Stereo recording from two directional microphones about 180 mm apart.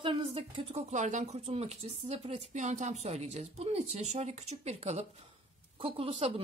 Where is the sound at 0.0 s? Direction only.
30° right (ahead or behind).